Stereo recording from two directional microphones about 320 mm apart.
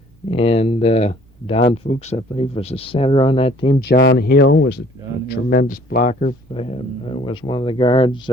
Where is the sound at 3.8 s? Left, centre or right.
Left.